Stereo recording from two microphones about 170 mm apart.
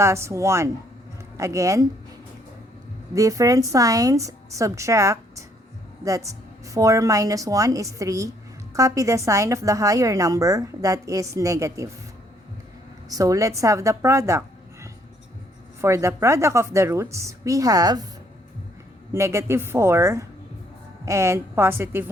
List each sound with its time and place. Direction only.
0.0 s a woman's voice: 15° right (ahead or behind)
3.2 s a woman's voice: 20° right (ahead or behind)
13.1 s a woman's voice: 20° right (ahead or behind)
19.1 s a woman's voice: 15° right (ahead or behind)